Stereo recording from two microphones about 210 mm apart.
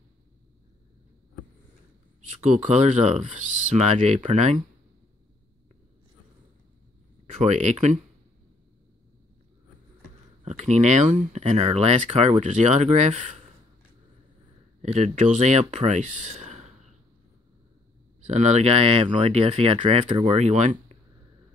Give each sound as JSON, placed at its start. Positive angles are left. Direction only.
{"t": 2.5, "sound": "speech", "side_deg": -35}
{"t": 7.3, "sound": "speech", "side_deg": -30}
{"t": 10.4, "sound": "speech", "side_deg": -35}
{"t": 14.8, "sound": "speech", "side_deg": -35}
{"t": 18.2, "sound": "speech", "side_deg": -35}